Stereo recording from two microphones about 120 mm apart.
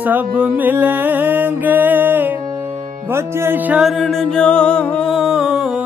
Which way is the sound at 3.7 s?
Centre (ahead or behind).